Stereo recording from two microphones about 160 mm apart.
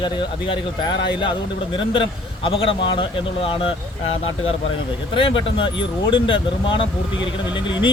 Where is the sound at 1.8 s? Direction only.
35° left (ahead or behind).